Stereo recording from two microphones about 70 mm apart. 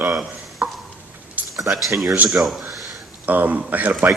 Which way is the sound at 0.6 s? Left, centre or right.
Right.